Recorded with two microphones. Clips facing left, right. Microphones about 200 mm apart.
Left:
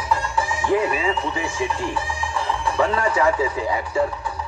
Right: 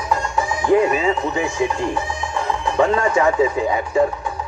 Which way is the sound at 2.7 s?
30° right (ahead or behind).